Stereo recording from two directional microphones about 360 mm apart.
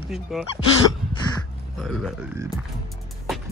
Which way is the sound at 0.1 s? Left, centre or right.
Centre.